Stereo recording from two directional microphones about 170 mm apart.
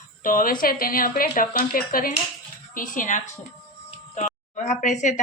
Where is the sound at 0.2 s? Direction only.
55° left (ahead or behind).